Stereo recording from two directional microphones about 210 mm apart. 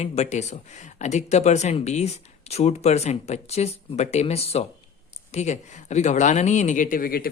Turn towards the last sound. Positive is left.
turn(degrees=45)  # may be behind; listen again after turning